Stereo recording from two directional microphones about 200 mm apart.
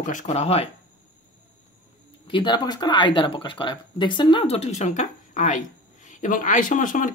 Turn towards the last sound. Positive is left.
turn(degrees=40)  # may be behind; listen again after turning